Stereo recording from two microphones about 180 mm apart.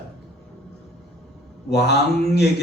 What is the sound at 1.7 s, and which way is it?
Speech, 65° left (ahead or behind).